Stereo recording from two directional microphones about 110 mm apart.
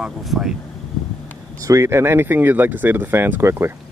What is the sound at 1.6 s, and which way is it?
Speech, 25° right (ahead or behind).